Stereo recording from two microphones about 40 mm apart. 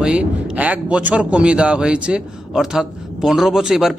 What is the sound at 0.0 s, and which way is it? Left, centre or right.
Speech, right.